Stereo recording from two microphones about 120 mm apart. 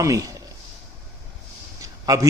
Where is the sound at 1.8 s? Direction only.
30° right (ahead or behind).